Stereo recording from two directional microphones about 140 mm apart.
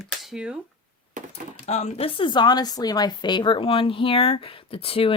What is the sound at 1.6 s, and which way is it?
Speech, 55° left (ahead or behind).